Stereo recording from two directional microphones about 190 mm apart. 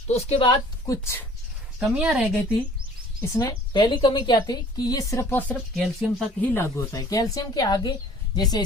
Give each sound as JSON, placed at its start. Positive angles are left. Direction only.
{"t": 0.1, "sound": "a woman's voice", "side_deg": 35}
{"t": 0.9, "sound": "speech", "side_deg": 15}
{"t": 1.8, "sound": "a woman's voice", "side_deg": -5}
{"t": 3.2, "sound": "a woman's voice", "side_deg": 20}